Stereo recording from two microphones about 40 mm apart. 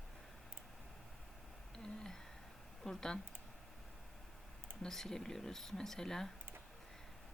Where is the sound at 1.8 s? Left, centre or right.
Centre.